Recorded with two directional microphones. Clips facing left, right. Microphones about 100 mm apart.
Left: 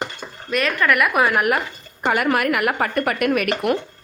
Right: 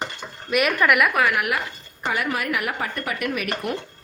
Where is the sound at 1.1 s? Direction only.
25° left (ahead or behind).